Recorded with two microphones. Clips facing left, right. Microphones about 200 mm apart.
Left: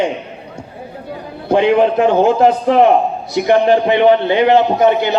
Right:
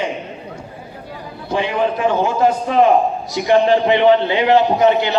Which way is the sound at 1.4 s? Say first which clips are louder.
Left 7 dB; 60° left (ahead or behind).